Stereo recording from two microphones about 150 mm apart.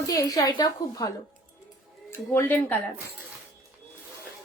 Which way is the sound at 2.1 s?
15° left (ahead or behind).